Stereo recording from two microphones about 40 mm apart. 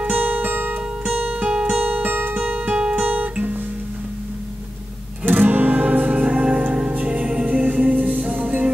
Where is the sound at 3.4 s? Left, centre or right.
Right.